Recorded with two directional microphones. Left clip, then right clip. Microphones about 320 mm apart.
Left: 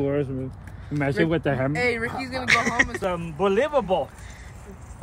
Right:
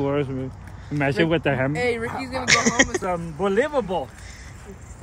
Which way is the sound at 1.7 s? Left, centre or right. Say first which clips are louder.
Even; centre.